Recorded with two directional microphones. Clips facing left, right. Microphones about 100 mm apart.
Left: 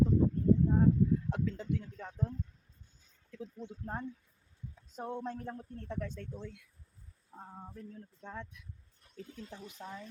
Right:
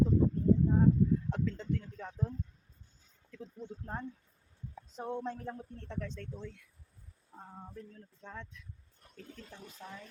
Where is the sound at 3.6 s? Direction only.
10° left (ahead or behind).